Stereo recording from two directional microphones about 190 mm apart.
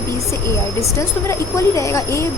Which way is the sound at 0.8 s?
15° left (ahead or behind).